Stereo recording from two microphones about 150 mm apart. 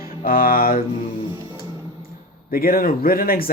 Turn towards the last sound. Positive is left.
turn(degrees=80)